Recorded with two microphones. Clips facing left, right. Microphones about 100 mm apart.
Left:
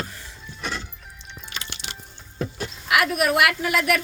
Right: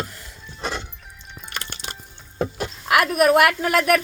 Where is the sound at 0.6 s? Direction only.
25° right (ahead or behind).